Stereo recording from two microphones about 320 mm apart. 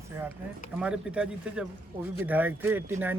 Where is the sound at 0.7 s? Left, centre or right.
Centre.